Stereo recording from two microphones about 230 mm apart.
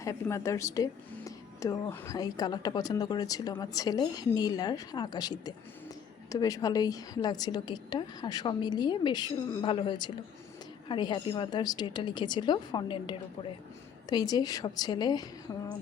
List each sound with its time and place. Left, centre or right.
0.0 s a woman's voice: centre